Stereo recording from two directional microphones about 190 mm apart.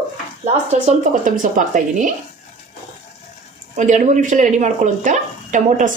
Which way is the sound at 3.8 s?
40° right (ahead or behind).